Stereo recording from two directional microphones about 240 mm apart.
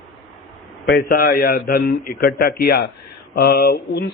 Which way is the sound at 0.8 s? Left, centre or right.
Left.